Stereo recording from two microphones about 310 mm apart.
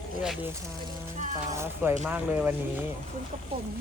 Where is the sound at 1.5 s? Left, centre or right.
Centre.